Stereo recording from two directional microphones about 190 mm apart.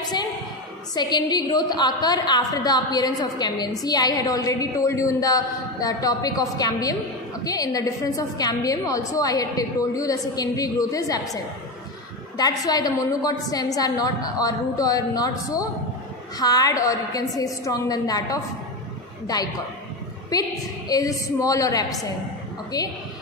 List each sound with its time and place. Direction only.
0.9 s a woman's voice: 20° left (ahead or behind)
12.4 s a woman's voice: 20° left (ahead or behind)